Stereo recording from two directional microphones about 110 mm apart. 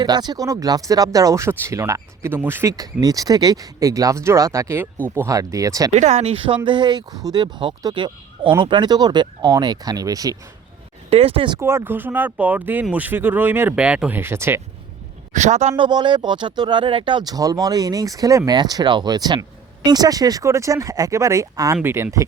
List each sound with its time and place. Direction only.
0.0 s speech: 40° right (ahead or behind); by 2.7 s 20° right (ahead or behind)
2.7 s speech: 35° right (ahead or behind)
5.9 s speech: 90° right
6.7 s speech: 45° right (ahead or behind)
11.1 s speech: 65° right (ahead or behind)
11.6 s speech: 20° right (ahead or behind)
14.2 s speech: 20° right (ahead or behind)
15.3 s speech: 90° right
15.7 s speech: 40° right (ahead or behind)
21.8 s speech: 20° right (ahead or behind)